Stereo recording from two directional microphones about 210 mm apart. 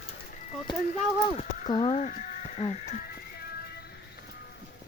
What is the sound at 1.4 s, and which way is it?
Sheep, 40° left (ahead or behind).